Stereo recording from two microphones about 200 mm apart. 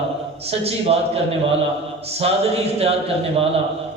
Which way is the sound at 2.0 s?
30° right (ahead or behind).